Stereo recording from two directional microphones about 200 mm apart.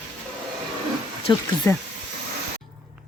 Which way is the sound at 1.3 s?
20° left (ahead or behind).